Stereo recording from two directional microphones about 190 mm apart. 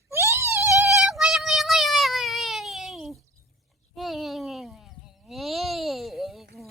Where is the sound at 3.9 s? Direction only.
Centre (ahead or behind).